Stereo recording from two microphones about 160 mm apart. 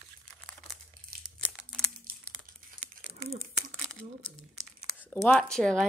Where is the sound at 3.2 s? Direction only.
45° right (ahead or behind).